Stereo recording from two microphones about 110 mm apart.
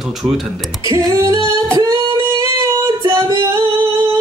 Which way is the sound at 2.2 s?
30° right (ahead or behind).